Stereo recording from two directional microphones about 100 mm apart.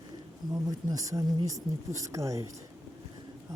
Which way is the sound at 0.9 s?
35° right (ahead or behind).